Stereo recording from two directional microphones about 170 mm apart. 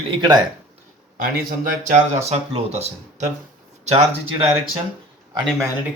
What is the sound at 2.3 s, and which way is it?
Speech, 40° right (ahead or behind).